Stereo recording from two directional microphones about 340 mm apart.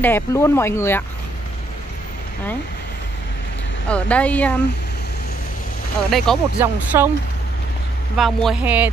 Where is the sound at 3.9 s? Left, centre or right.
Centre.